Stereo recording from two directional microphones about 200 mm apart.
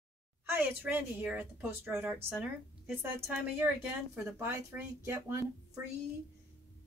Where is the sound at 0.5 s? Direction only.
10° right (ahead or behind).